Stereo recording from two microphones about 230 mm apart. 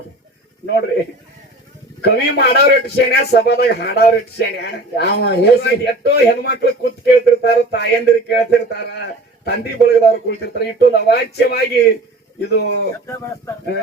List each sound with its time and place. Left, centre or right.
2.0 s a man's voice: left